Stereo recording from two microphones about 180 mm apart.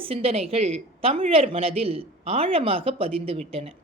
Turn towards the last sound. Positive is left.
turn(degrees=-35)  # may be behind; listen again after turning